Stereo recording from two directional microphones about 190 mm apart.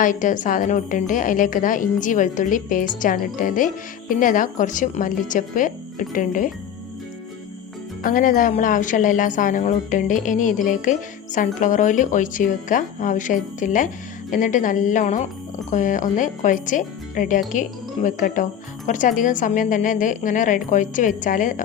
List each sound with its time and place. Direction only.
0.0 s speech: 45° left (ahead or behind)
8.0 s speech: 45° left (ahead or behind)